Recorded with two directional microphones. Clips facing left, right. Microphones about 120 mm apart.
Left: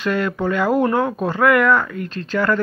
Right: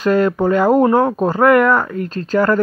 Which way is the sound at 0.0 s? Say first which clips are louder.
Right 6 dB; 40° right (ahead or behind).